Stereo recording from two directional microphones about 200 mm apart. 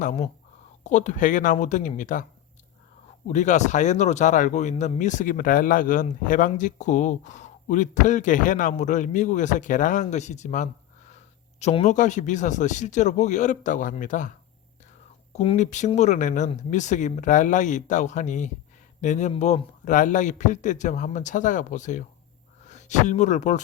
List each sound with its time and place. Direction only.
0.0 s speech: 35° left (ahead or behind)
3.2 s speech: 35° left (ahead or behind)